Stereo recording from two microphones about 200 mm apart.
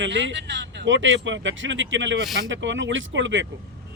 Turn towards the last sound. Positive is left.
turn(degrees=-65)  # may be behind; listen again after turning